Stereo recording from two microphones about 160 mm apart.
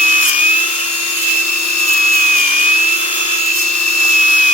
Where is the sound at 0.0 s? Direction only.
45° left (ahead or behind).